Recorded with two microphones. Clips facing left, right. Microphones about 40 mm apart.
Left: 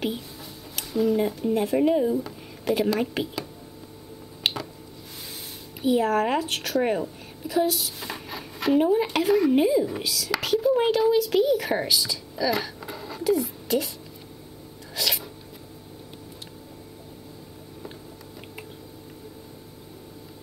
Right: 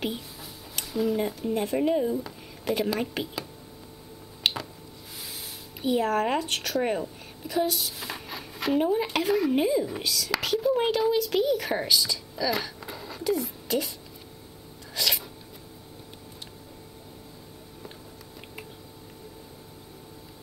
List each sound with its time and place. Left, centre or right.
0.7 s speech: centre
4.4 s squish: centre
5.8 s a woman's voice: centre
15.0 s a sound: centre